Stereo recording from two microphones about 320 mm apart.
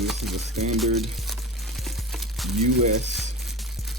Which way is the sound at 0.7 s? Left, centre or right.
Centre.